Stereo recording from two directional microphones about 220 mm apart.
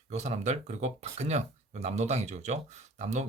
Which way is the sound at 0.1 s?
30° right (ahead or behind).